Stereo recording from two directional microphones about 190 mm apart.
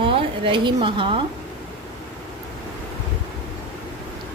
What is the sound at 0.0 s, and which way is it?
Speech, 25° right (ahead or behind).